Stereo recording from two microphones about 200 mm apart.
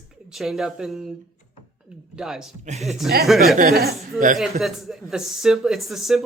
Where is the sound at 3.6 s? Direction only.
50° right (ahead or behind).